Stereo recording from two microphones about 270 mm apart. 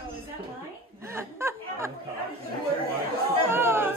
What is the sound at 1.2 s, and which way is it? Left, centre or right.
Chuckle, centre.